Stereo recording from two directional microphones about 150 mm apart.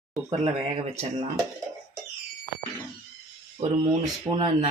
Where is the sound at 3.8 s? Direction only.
30° right (ahead or behind).